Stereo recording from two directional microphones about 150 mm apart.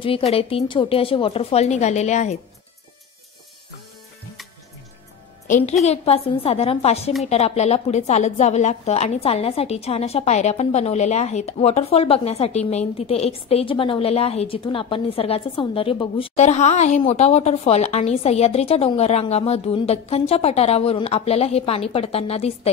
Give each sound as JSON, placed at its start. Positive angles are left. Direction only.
{"t": 0.0, "sound": "speech", "side_deg": 40}
{"t": 5.9, "sound": "a woman's voice", "side_deg": 45}